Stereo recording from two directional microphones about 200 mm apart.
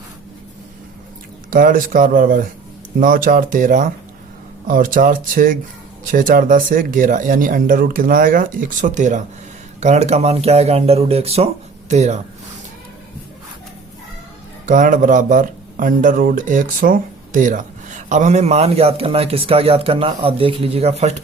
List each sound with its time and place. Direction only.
1.5 s speech: 45° right (ahead or behind)
14.7 s speech: 40° right (ahead or behind)